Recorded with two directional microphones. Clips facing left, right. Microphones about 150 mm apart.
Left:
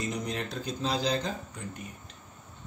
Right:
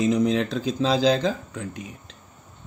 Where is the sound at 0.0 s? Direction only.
90° right.